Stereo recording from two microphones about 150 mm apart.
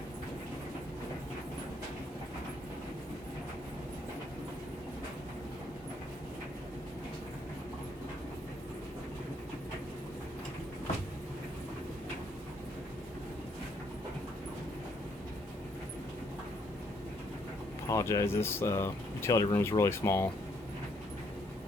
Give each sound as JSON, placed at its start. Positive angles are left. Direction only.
{"t": 17.8, "sound": "speech", "side_deg": 20}